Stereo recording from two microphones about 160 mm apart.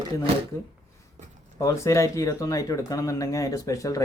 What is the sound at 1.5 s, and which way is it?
Speech, 20° left (ahead or behind).